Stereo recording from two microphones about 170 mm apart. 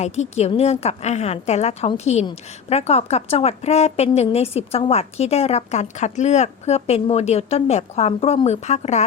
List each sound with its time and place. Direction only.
0.0 s a woman's voice: 40° left (ahead or behind)